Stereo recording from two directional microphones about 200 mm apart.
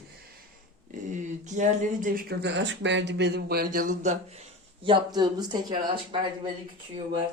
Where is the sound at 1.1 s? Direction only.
35° right (ahead or behind); by 6.2 s 20° right (ahead or behind).